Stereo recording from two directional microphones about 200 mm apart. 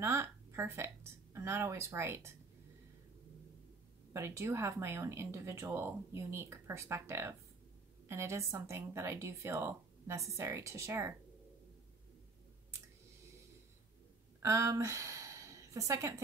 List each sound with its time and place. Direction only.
0.0 s a woman's voice: 15° right (ahead or behind)
4.1 s speech: 15° right (ahead or behind)
14.4 s a woman's voice: 15° right (ahead or behind)